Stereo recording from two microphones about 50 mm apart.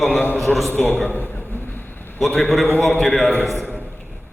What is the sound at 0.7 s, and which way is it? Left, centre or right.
Speech, left.